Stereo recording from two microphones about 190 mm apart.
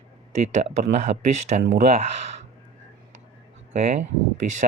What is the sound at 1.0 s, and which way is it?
Speech, 40° right (ahead or behind).